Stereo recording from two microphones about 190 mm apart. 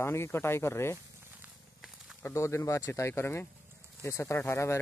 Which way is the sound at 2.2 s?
15° left (ahead or behind).